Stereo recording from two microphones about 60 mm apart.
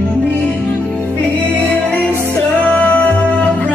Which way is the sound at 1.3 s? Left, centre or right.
Left.